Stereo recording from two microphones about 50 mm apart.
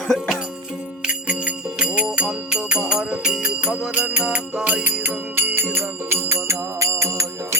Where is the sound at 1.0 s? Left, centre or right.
Right.